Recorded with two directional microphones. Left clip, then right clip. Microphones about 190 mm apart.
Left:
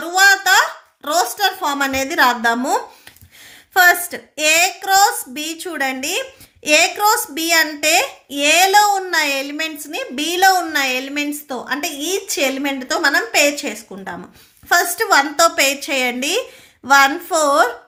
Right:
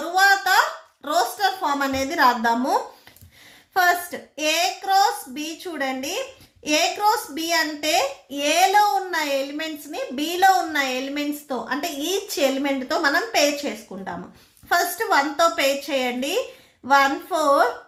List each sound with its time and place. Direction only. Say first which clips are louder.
0.1 s a sound: left 5 dB; 35° left (ahead or behind)
1.0 s a woman's voice: left 4 dB; 35° left (ahead or behind)
14.7 s a child's voice: left 6 dB; 35° left (ahead or behind)